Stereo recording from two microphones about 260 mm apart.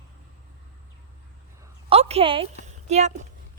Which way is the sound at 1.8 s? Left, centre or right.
Right.